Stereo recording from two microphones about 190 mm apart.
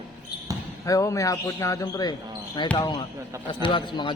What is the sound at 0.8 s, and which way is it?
A man's voice, 15° left (ahead or behind).